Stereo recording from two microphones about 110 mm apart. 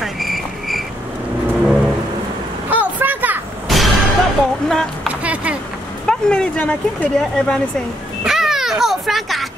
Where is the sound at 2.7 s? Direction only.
15° right (ahead or behind).